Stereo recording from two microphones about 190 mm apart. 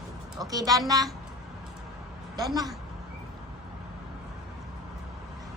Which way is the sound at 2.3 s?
20° right (ahead or behind).